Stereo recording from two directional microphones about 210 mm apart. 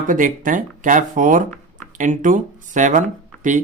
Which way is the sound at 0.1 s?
40° right (ahead or behind).